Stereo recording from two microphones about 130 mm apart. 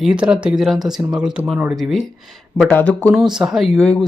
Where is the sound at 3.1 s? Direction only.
5° right (ahead or behind).